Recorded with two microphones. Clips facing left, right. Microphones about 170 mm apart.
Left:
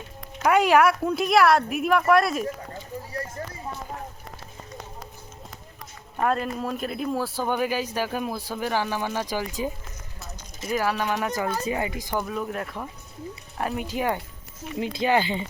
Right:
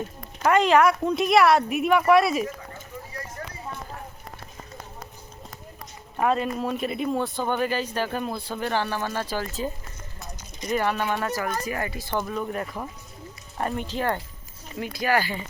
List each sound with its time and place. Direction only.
0.4 s speech: 10° left (ahead or behind)
6.1 s speech: centre (ahead or behind)
11.1 s speech: 15° left (ahead or behind)
12.2 s speech: centre (ahead or behind)
14.8 s speech: 20° left (ahead or behind)